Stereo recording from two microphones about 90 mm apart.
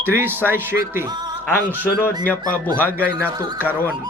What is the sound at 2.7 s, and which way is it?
Speech, 20° left (ahead or behind).